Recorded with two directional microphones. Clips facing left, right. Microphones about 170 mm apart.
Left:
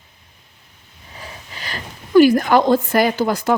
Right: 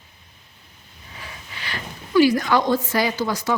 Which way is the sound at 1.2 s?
40° left (ahead or behind).